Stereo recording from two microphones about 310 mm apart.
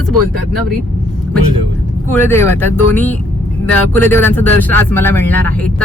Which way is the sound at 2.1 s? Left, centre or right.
Centre.